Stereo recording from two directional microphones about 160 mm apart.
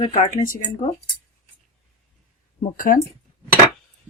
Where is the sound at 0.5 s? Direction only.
25° left (ahead or behind).